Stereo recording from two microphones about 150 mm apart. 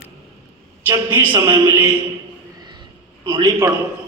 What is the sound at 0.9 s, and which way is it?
Speech, 15° right (ahead or behind).